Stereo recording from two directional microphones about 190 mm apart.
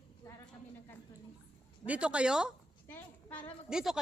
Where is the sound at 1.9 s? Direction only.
5° right (ahead or behind).